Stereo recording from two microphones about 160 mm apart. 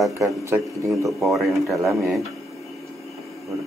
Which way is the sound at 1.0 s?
Centre (ahead or behind).